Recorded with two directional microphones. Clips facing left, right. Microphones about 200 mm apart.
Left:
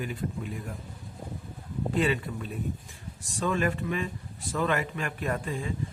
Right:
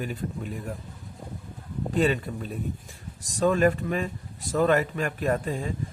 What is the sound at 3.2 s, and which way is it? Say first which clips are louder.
Speech: right 6 dB; 40° right (ahead or behind).